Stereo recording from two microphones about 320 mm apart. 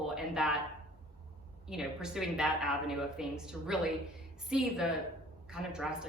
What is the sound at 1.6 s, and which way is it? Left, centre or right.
A woman's voice, centre.